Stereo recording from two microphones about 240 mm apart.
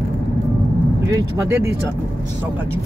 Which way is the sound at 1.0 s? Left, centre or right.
Centre.